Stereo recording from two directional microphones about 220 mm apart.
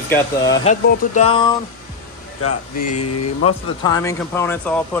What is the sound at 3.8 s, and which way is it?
Speech, 15° left (ahead or behind).